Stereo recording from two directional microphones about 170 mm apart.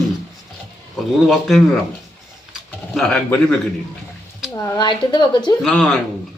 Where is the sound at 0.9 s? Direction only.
Centre (ahead or behind).